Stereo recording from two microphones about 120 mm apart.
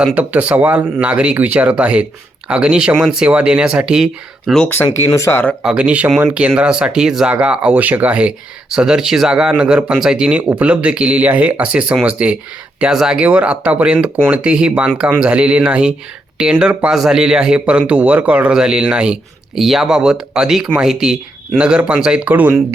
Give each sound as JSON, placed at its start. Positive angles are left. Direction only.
{"t": 0.0, "sound": "speech", "side_deg": -10}
{"t": 4.6, "sound": "speech", "side_deg": 20}
{"t": 5.6, "sound": "speech", "side_deg": -10}